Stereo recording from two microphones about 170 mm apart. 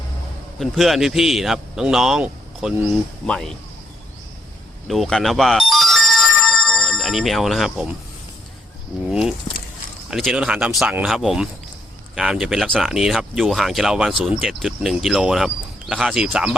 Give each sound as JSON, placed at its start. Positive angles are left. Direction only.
{"t": 0.6, "sound": "a man's voice", "side_deg": 0}
{"t": 4.9, "sound": "ringtone", "side_deg": 0}
{"t": 9.5, "sound": "speech", "side_deg": 45}
{"t": 10.1, "sound": "a man's voice", "side_deg": 0}